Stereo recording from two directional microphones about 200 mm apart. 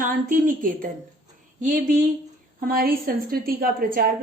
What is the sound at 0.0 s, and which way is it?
Speech, 40° right (ahead or behind).